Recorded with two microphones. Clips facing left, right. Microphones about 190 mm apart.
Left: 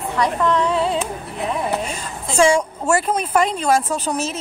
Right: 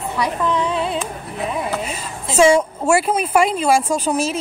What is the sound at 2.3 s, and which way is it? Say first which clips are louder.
A woman's voice: right 2 dB; 5° right (ahead or behind).